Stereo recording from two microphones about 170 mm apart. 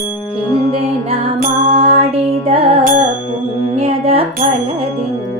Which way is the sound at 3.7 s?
35° right (ahead or behind).